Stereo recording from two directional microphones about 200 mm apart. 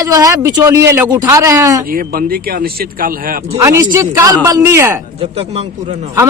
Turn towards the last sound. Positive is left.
turn(degrees=-35)  # may be behind; listen again after turning